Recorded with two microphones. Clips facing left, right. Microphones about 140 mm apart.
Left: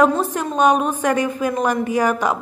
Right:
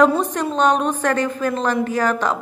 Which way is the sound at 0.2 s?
10° left (ahead or behind).